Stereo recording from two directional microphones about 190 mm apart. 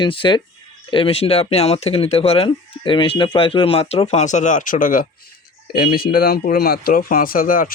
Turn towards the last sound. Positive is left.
turn(degrees=45)  # may be behind; listen again after turning